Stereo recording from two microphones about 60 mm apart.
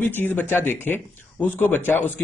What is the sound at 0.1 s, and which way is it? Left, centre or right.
A man's voice, left.